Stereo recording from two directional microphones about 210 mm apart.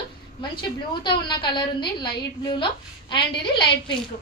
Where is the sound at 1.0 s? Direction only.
20° left (ahead or behind).